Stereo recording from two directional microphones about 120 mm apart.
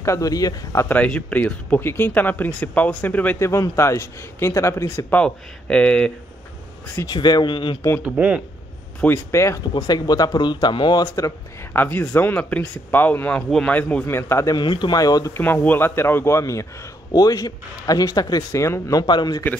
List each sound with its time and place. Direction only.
0.0 s a man's voice: 25° left (ahead or behind)
0.8 s speech: 10° left (ahead or behind)
3.3 s a man's voice: 25° left (ahead or behind)
5.1 s speech: 10° left (ahead or behind)
7.1 s speech: 35° left (ahead or behind)
8.0 s speech: 10° right (ahead or behind)
9.0 s speech: 20° left (ahead or behind)
11.7 s a man's voice: 15° left (ahead or behind)
14.6 s speech: 40° left (ahead or behind)
15.3 s a man's voice: 15° left (ahead or behind); by 19.4 s 35° left (ahead or behind)